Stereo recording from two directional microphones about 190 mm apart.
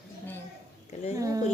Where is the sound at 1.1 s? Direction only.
15° right (ahead or behind).